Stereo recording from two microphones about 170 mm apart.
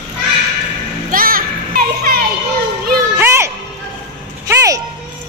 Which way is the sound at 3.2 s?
15° right (ahead or behind).